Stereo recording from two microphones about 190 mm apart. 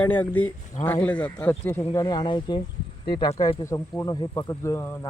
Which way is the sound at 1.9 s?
25° left (ahead or behind).